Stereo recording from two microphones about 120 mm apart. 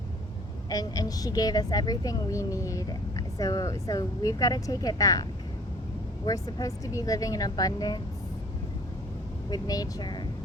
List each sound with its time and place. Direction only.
0.7 s a woman's voice: 30° left (ahead or behind)
6.2 s speech: 30° left (ahead or behind)
9.5 s a woman's voice: 30° left (ahead or behind)